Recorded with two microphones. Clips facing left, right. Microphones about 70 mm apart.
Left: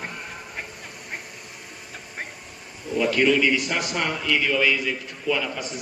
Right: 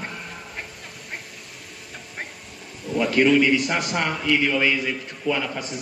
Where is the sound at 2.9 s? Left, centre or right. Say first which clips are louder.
Right 1 dB; centre.